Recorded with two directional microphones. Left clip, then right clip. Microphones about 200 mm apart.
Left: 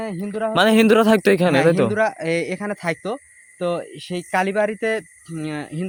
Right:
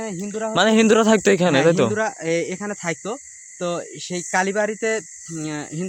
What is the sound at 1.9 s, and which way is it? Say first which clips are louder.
Speech: left 2 dB; 25° left (ahead or behind).